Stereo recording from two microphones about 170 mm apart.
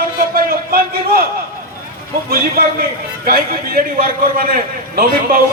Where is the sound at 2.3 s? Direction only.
60° right (ahead or behind).